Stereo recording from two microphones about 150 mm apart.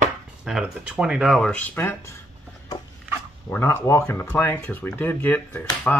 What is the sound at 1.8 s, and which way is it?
Speech, 15° left (ahead or behind).